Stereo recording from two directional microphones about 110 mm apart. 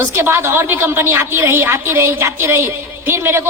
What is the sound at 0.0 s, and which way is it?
A woman's voice, 20° right (ahead or behind).